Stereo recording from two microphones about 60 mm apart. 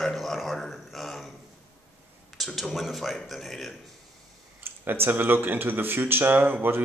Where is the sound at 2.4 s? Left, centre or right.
Centre.